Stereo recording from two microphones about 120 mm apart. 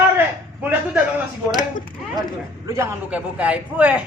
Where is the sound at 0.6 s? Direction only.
15° right (ahead or behind).